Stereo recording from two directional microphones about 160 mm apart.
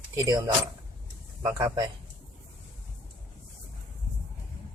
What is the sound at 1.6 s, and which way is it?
Speech, 15° right (ahead or behind).